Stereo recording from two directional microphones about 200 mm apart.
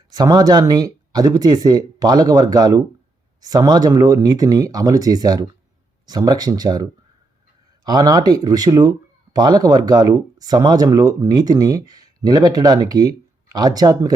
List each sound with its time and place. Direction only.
0.1 s speech: 20° right (ahead or behind)